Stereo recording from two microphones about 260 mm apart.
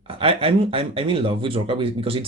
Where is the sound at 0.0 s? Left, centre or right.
Right.